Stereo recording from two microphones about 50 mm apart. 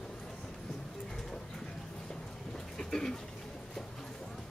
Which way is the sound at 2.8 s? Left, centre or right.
Centre.